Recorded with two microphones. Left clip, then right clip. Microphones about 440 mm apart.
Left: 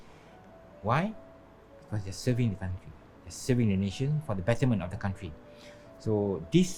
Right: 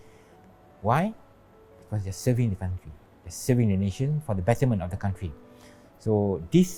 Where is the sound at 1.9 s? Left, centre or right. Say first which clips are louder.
Right 4 dB; right.